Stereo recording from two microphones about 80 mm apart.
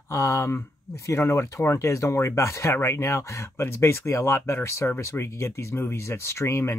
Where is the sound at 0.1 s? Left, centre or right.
Left.